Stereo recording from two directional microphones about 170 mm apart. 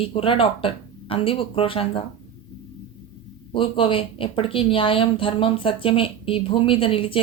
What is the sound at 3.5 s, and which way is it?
A woman's voice, 30° left (ahead or behind).